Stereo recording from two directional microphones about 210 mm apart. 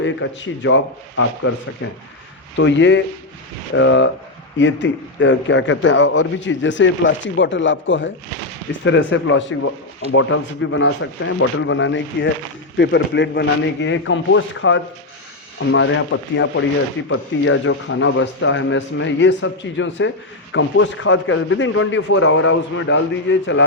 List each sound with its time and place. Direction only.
0.0 s speech: 65° left (ahead or behind); by 1.5 s 90° left
1.8 s a man's voice: 65° left (ahead or behind)
17.1 s speech: 70° left (ahead or behind)